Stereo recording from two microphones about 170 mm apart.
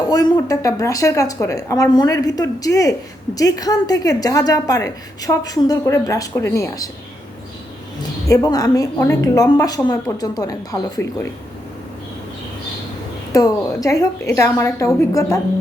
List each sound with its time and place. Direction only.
0.1 s a woman's voice: 20° left (ahead or behind)
8.3 s a woman's voice: 20° left (ahead or behind)
13.3 s a woman's voice: 20° left (ahead or behind)